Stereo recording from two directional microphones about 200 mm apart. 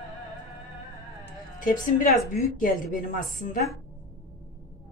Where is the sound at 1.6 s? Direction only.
45° left (ahead or behind).